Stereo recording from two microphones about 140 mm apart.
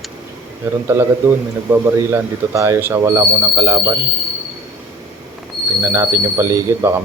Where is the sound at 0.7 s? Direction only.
15° right (ahead or behind).